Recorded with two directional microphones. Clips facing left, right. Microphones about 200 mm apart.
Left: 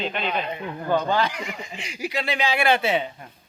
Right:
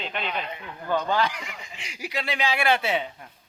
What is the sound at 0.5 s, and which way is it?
Speech, 25° left (ahead or behind).